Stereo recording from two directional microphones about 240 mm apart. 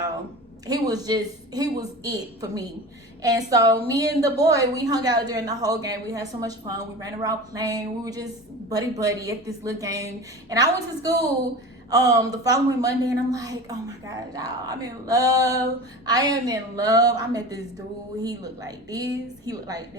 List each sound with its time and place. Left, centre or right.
0.7 s a woman's voice: centre